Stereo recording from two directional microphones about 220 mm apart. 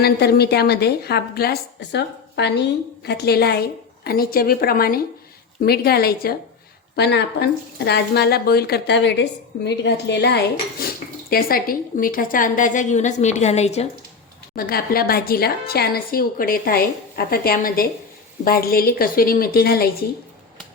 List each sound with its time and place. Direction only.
0.0 s speech: 45° left (ahead or behind)
9.6 s dishes: 50° left (ahead or behind); by 13.8 s 30° left (ahead or behind)
14.5 s speech: 40° left (ahead or behind)